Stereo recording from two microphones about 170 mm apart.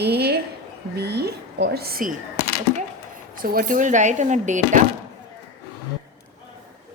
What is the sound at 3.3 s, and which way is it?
A woman's voice, 55° right (ahead or behind).